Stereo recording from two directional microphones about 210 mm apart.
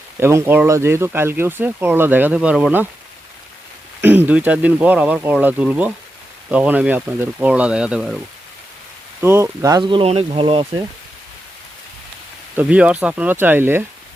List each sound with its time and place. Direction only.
0.2 s speech: 10° right (ahead or behind)
4.0 s speech: 10° right (ahead or behind)
9.2 s speech: 10° right (ahead or behind)
12.5 s speech: 5° right (ahead or behind)